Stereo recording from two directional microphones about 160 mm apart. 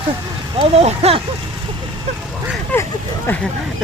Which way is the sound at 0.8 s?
40° right (ahead or behind).